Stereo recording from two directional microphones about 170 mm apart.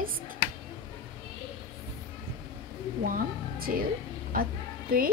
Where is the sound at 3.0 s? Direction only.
55° right (ahead or behind).